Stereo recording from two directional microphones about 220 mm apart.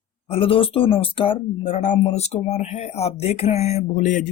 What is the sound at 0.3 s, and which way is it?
Speech, 25° left (ahead or behind).